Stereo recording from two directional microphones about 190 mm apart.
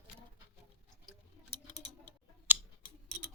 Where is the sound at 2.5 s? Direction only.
10° right (ahead or behind).